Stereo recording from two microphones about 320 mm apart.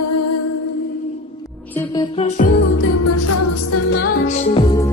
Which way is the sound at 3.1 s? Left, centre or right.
Left.